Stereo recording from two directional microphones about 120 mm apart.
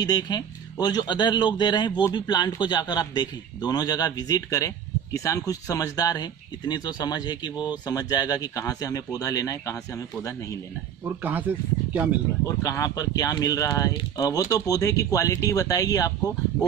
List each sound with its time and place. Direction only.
0.0 s a man's voice: 35° left (ahead or behind)
11.1 s speech: 15° right (ahead or behind)
12.4 s speech: 25° left (ahead or behind)